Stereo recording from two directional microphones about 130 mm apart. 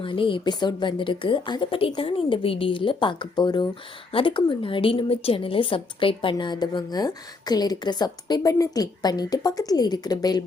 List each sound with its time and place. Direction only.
0.0 s a woman's voice: 40° left (ahead or behind)